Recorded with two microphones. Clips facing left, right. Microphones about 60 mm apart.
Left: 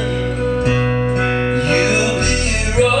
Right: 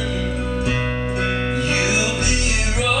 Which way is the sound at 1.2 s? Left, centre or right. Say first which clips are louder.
Left 5 dB; centre.